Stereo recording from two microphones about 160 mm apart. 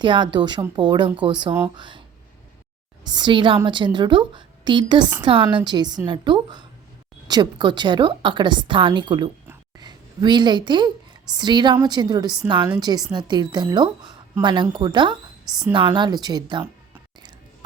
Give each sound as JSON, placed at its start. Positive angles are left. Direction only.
{"t": 0.0, "sound": "a woman's voice", "side_deg": -30}
{"t": 3.0, "sound": "a woman's voice", "side_deg": -25}